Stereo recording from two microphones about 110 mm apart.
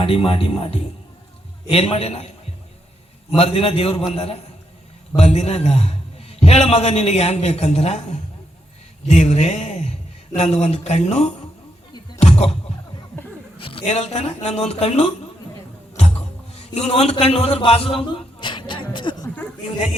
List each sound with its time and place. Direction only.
0.0 s a man's voice: 55° left (ahead or behind)
3.3 s a man's voice: 65° left (ahead or behind)
5.1 s a man's voice: 85° left
12.2 s music: 70° left (ahead or behind)
13.6 s a sound: 55° left (ahead or behind)
13.8 s a man's voice: 85° left
16.6 s a man's voice: 75° left (ahead or behind); by 19.3 s 45° left (ahead or behind)